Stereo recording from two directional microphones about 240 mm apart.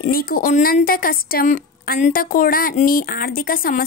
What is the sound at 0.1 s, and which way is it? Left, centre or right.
A woman's voice, left.